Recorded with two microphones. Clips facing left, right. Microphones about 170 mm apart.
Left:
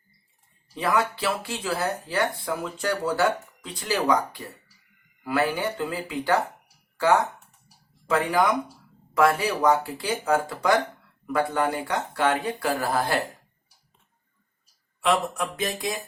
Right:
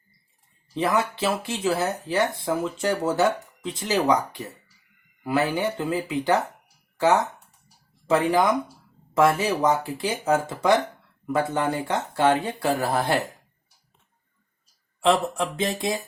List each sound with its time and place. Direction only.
0.8 s speech: 20° right (ahead or behind)
15.0 s speech: 25° right (ahead or behind)